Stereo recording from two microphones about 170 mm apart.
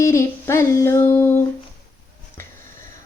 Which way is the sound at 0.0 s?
15° left (ahead or behind).